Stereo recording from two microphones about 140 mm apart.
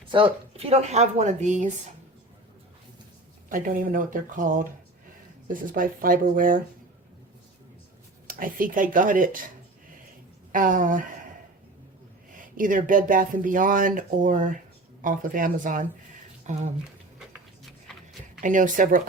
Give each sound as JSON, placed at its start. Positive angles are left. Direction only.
{"t": 0.1, "sound": "a woman's voice", "side_deg": -40}
{"t": 3.5, "sound": "speech", "side_deg": -80}
{"t": 8.3, "sound": "speech", "side_deg": -80}
{"t": 10.5, "sound": "speech", "side_deg": -70}
{"t": 12.5, "sound": "speech", "side_deg": -75}
{"t": 16.5, "sound": "speech", "side_deg": -55}
{"t": 18.3, "sound": "speech", "side_deg": -70}